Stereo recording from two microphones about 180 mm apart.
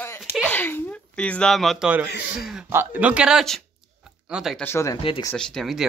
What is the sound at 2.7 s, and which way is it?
Speech, 10° right (ahead or behind).